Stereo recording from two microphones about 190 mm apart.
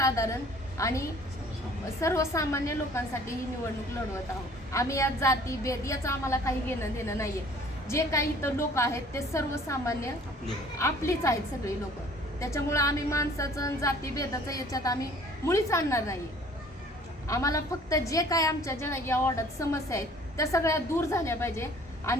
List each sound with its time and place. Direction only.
0.0 s a woman's voice: 15° left (ahead or behind)
4.7 s a woman's voice: 15° left (ahead or behind)
17.2 s a woman's voice: 15° left (ahead or behind)